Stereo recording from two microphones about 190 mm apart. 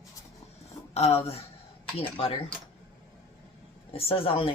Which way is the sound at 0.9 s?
30° left (ahead or behind).